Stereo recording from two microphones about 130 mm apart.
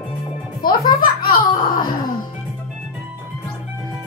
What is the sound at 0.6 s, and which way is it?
Music, 90° left.